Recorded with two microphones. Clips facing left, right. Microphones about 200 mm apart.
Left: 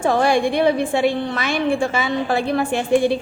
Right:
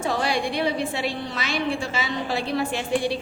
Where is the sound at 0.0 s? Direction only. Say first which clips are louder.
Left 7 dB; 50° left (ahead or behind).